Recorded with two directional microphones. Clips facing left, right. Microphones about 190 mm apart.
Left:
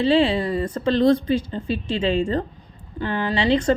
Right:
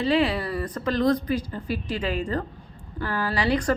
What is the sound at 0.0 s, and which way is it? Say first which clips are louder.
Speech: left 4 dB; 30° left (ahead or behind).